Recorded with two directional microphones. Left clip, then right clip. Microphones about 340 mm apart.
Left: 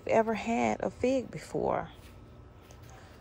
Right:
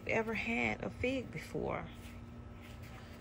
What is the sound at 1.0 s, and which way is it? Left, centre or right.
Speech, left.